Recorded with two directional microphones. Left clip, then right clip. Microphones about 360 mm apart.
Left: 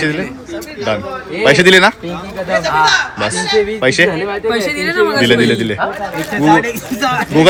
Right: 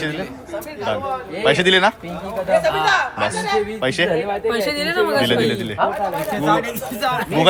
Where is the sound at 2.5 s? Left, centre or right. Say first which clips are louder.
Left 4 dB; centre.